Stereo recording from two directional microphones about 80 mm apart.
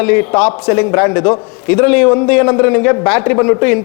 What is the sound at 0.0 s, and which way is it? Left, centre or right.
A man's voice, centre.